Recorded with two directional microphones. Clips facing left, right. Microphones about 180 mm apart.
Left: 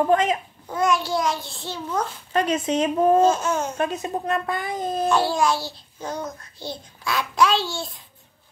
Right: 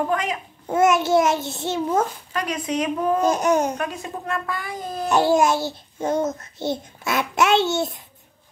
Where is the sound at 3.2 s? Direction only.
15° right (ahead or behind).